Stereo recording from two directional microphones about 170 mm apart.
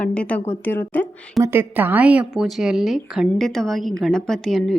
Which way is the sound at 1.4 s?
10° right (ahead or behind).